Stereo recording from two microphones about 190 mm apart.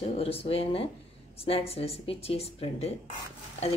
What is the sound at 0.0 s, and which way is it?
Speech, 30° left (ahead or behind).